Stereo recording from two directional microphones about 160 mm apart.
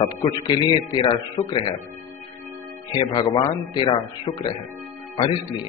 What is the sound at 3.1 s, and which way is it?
A man's voice, 25° left (ahead or behind).